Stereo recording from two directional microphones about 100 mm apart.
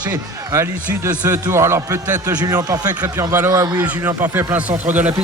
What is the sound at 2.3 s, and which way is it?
Speech, 40° right (ahead or behind).